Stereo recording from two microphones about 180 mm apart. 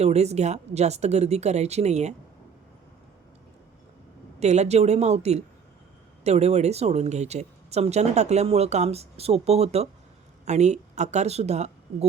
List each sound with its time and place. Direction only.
0.0 s speech: 35° right (ahead or behind)
4.4 s speech: 40° right (ahead or behind)